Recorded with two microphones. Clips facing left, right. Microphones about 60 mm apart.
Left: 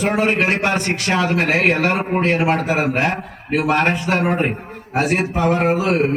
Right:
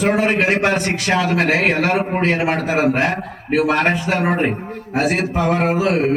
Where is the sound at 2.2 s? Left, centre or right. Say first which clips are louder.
Left 1 dB; centre.